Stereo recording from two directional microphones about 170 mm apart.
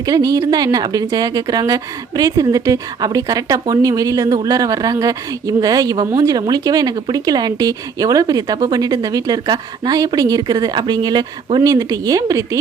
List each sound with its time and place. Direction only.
0.0 s a woman's voice: 20° right (ahead or behind)